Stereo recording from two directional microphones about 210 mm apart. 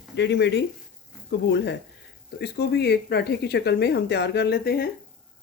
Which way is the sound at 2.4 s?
50° left (ahead or behind).